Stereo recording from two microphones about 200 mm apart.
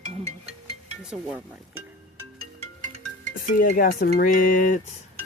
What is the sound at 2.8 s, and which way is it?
Music, 40° right (ahead or behind).